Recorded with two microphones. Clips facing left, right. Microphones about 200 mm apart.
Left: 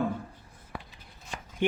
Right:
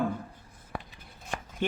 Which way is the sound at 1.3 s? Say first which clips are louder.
Right 4 dB; 55° right (ahead or behind).